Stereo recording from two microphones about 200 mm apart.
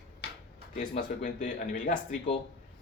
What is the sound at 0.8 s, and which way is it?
Speech, 40° left (ahead or behind).